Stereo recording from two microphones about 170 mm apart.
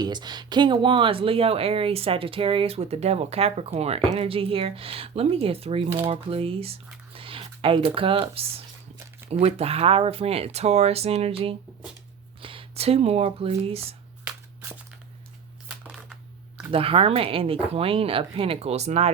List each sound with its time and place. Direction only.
0.0 s speech: 25° right (ahead or behind)
15.8 s a sound: 5° right (ahead or behind)
16.7 s speech: 35° right (ahead or behind)